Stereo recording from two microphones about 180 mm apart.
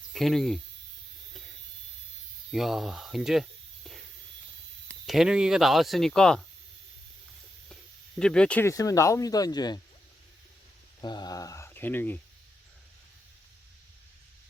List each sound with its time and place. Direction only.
0.1 s speech: centre (ahead or behind)
1.3 s a sound: centre (ahead or behind)
2.5 s speech: centre (ahead or behind)
4.9 s speech: centre (ahead or behind)
8.2 s speech: 5° left (ahead or behind); by 9.8 s 20° left (ahead or behind)
11.0 s speech: 25° left (ahead or behind)